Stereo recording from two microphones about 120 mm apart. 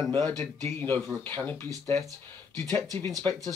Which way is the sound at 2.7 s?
15° left (ahead or behind).